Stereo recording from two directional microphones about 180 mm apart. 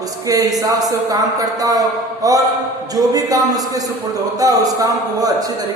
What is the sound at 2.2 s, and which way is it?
A woman's voice, 20° right (ahead or behind).